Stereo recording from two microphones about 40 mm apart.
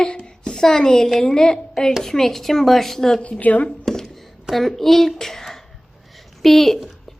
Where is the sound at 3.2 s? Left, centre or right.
Left.